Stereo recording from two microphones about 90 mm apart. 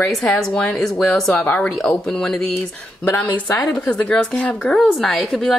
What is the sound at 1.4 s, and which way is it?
Speech, 15° left (ahead or behind).